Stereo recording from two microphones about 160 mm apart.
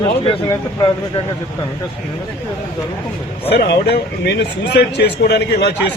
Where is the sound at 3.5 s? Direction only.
90° left.